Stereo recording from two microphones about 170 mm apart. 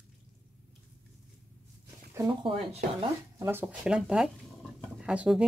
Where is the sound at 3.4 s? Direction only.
15° right (ahead or behind).